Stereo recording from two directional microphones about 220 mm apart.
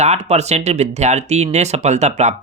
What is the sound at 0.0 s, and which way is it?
Speech, 30° right (ahead or behind).